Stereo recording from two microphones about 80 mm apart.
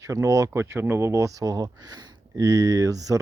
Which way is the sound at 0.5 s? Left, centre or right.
Right.